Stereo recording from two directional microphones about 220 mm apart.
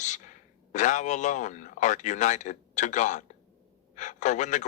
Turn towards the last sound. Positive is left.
turn(degrees=35)  # may be behind; listen again after turning